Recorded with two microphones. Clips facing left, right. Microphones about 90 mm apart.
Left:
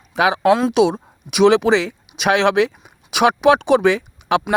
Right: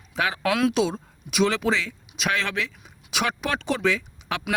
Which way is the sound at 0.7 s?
65° left (ahead or behind).